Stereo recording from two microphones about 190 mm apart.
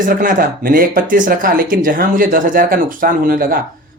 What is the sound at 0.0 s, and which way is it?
Speech, 45° right (ahead or behind).